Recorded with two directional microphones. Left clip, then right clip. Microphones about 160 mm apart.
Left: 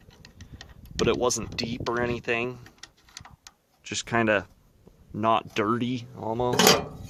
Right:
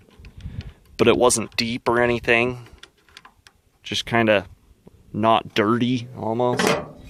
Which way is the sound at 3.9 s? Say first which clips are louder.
Right 5 dB; 35° right (ahead or behind).